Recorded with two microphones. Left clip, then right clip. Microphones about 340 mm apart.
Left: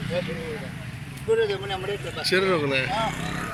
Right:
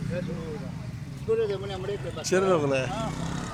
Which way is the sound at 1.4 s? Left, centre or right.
Left.